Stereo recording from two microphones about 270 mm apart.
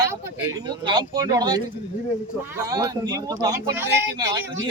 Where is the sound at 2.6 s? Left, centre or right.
Centre.